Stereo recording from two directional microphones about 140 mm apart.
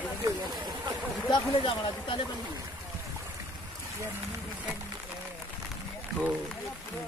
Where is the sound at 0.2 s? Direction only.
30° right (ahead or behind).